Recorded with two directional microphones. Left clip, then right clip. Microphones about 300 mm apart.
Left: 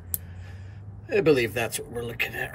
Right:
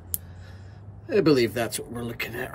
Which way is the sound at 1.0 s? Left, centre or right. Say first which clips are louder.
Right 1 dB; right.